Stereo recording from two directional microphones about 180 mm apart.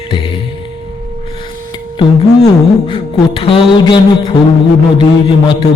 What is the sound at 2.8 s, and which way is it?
A man's voice, 30° left (ahead or behind).